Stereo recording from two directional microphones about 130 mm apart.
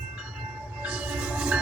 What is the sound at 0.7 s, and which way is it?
Train, 10° right (ahead or behind).